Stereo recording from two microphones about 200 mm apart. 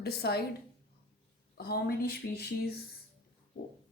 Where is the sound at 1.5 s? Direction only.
50° left (ahead or behind).